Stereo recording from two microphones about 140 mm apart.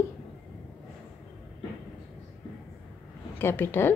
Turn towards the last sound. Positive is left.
turn(degrees=15)  # may be behind; listen again after turning